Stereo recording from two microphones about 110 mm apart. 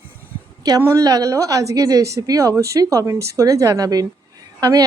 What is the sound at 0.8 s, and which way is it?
Speech, 30° right (ahead or behind).